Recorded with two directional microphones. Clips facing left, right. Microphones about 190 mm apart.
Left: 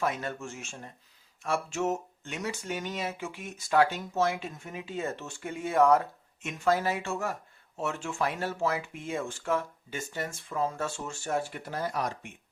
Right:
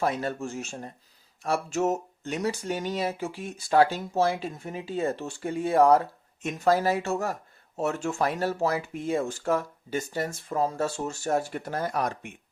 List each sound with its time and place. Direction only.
0.0 s speech: 35° right (ahead or behind); by 12.3 s 55° right (ahead or behind)